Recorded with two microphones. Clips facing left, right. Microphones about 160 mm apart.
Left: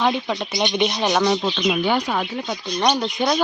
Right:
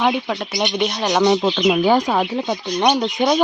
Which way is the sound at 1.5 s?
55° right (ahead or behind).